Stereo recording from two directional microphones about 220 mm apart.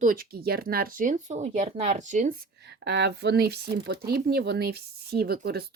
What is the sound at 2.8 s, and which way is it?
Speech, 50° right (ahead or behind).